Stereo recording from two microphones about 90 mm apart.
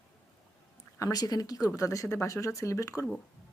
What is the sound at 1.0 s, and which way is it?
A woman's voice, 45° left (ahead or behind).